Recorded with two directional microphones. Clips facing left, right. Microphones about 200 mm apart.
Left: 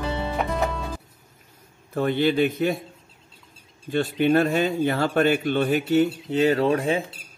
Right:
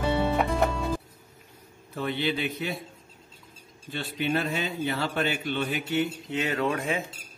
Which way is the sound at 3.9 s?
50° left (ahead or behind).